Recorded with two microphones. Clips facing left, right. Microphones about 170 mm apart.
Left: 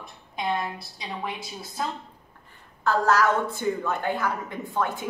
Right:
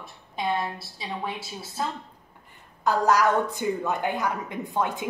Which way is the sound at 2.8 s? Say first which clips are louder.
Even; 15° right (ahead or behind).